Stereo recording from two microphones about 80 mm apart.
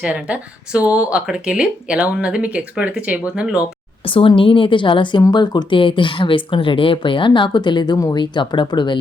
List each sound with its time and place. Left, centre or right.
0.0 s speech: centre
4.1 s speech: left
5.3 s speech: left